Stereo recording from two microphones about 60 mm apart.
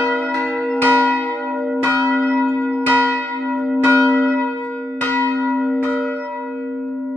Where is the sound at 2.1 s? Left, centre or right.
Centre.